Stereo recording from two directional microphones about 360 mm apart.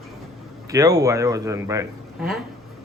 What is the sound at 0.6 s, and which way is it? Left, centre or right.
A man's voice, centre.